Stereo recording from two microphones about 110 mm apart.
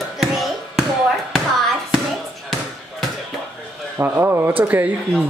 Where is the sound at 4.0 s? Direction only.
20° right (ahead or behind).